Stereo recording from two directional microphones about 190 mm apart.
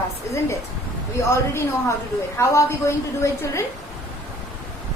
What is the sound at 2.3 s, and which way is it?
A woman's voice, 15° left (ahead or behind).